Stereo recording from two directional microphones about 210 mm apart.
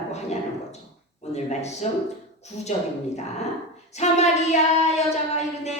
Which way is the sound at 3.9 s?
30° left (ahead or behind).